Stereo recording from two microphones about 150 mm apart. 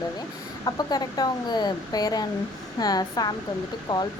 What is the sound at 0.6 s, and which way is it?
Speech, 25° left (ahead or behind).